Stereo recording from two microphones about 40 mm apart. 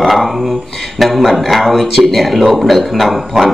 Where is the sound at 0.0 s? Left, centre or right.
Centre.